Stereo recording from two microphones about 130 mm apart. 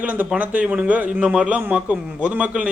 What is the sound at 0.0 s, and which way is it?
A man's voice, 10° right (ahead or behind).